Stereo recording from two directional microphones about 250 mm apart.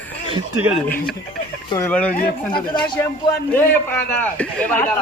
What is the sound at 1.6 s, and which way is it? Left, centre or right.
Speech, centre.